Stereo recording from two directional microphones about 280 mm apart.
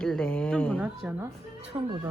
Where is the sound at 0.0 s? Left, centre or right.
Centre.